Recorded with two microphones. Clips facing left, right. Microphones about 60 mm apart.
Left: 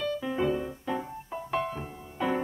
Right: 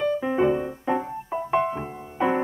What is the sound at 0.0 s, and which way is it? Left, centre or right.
Music, right.